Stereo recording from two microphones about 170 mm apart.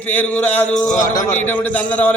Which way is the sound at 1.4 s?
10° left (ahead or behind).